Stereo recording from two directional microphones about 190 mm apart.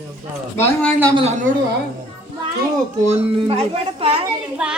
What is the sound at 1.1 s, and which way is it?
Speech, 35° right (ahead or behind).